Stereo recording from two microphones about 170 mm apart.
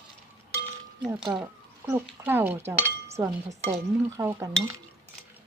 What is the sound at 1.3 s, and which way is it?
A woman's voice, 15° right (ahead or behind).